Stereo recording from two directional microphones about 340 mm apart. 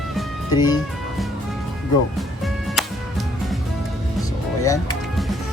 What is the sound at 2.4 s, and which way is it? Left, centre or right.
Music, centre.